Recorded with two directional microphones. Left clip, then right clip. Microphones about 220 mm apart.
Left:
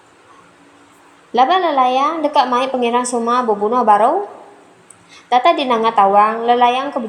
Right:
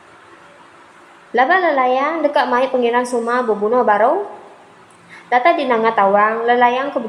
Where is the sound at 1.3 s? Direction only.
25° left (ahead or behind).